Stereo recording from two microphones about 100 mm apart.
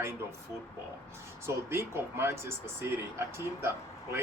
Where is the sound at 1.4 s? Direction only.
25° right (ahead or behind).